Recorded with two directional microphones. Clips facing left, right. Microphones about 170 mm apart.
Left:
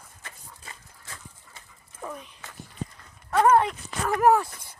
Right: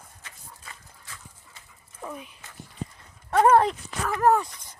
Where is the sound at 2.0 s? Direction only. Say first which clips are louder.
Even; 5° right (ahead or behind).